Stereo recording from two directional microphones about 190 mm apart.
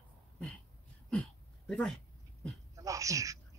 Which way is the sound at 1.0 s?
5° left (ahead or behind).